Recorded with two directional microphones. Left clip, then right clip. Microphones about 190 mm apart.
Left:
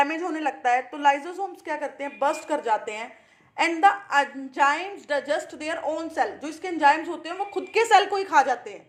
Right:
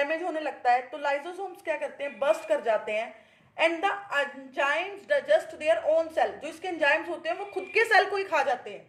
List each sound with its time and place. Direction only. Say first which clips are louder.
0.0 s a woman's voice: left 4 dB; 30° left (ahead or behind)